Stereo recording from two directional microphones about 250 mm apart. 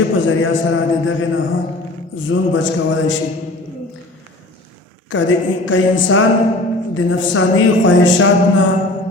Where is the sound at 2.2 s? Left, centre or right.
Left.